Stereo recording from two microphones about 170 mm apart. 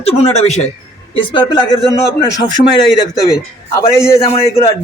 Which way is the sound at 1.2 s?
30° left (ahead or behind).